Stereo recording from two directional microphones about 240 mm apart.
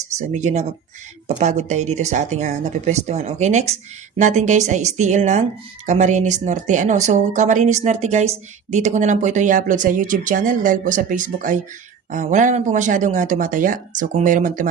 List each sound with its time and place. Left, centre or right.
0.2 s speech: right